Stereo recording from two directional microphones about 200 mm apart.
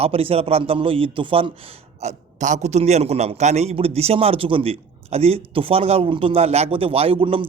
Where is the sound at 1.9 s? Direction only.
35° right (ahead or behind).